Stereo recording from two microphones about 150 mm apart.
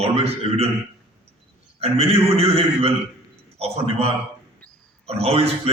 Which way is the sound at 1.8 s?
40° right (ahead or behind).